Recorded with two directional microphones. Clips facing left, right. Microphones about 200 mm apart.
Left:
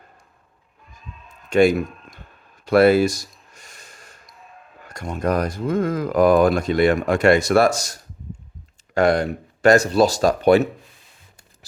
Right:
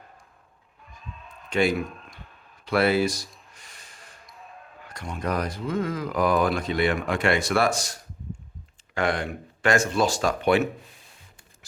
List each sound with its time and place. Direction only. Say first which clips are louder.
1.5 s a sound: left 7 dB; 45° left (ahead or behind)
4.9 s speech: left 7 dB; 45° left (ahead or behind)
9.0 s speech: left 8 dB; 40° left (ahead or behind)